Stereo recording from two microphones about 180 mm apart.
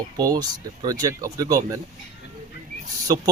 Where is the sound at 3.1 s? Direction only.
20° right (ahead or behind).